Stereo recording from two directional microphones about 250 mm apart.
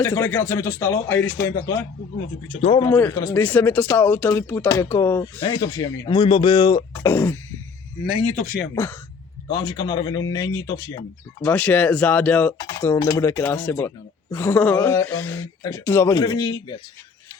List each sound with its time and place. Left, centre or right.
0.0 s speech: centre
2.6 s speech: left
8.0 s speech: centre
8.7 s speech: centre